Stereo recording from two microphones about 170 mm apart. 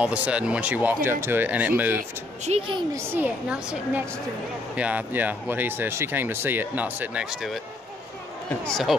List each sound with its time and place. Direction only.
0.0 s speech: 5° right (ahead or behind)
2.0 s speech: 40° right (ahead or behind)
2.9 s speech: 10° right (ahead or behind)
8.6 s speech: centre (ahead or behind)